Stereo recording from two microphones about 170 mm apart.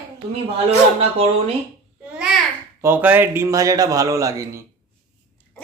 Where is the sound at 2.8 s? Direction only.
10° right (ahead or behind).